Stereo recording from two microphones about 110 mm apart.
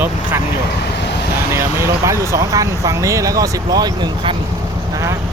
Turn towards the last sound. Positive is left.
turn(degrees=-40)  # may be behind; listen again after turning